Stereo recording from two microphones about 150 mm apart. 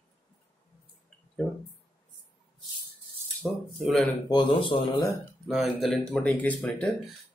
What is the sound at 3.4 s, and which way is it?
Speech, centre (ahead or behind).